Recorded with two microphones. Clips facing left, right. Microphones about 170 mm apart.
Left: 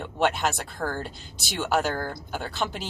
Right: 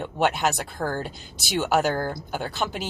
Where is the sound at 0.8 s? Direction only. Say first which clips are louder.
Right 2 dB; 20° right (ahead or behind).